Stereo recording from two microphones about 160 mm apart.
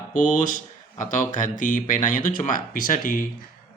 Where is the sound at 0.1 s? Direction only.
55° left (ahead or behind).